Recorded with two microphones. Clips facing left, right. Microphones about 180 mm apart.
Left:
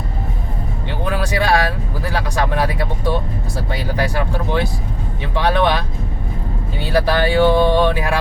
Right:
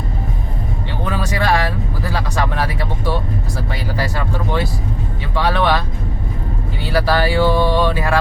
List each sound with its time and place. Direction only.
1.0 s music: 15° left (ahead or behind)
2.0 s a sound: 15° left (ahead or behind)
3.7 s speech: 15° left (ahead or behind)
6.9 s speech: 20° left (ahead or behind)